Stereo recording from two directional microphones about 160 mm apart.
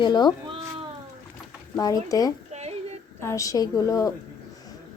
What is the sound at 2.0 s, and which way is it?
Speech, 20° left (ahead or behind).